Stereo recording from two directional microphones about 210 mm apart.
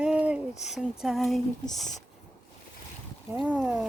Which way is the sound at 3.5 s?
5° right (ahead or behind).